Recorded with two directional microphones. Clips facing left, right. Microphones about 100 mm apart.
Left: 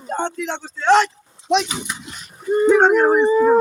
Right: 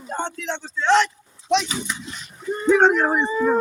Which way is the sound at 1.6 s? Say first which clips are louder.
Even; 20° left (ahead or behind).